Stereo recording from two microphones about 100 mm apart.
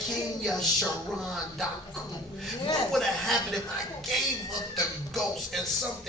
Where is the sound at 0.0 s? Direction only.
Centre (ahead or behind).